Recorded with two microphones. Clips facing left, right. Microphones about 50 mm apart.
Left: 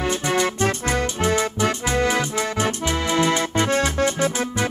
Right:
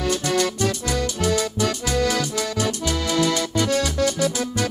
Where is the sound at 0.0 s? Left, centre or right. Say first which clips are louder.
Even; left.